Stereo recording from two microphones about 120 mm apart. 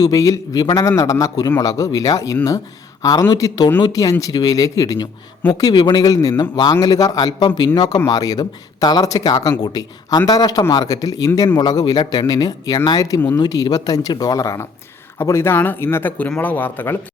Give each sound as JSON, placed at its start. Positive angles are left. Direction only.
{"t": 0.0, "sound": "a man's voice", "side_deg": 30}